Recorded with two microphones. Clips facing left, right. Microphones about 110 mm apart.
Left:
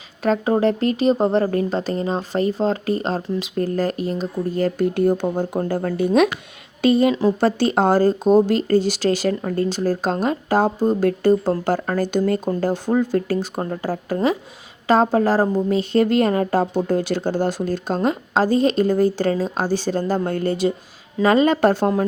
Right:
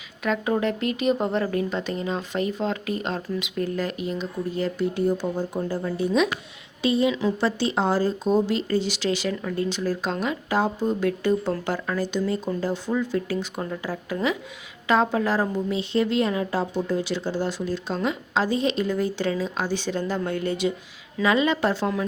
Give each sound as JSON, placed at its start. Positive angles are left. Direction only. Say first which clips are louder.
{"t": 0.2, "sound": "speech", "louder": "left 6 dB", "side_deg": 35}